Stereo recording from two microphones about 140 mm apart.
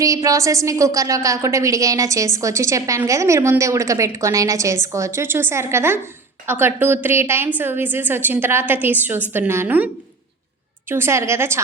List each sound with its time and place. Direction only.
0.0 s a woman's voice: 25° right (ahead or behind)